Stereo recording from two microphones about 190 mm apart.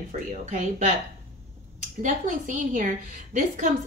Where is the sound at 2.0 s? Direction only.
40° right (ahead or behind).